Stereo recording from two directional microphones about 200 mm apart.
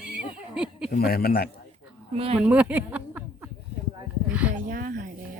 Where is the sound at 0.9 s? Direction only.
50° left (ahead or behind).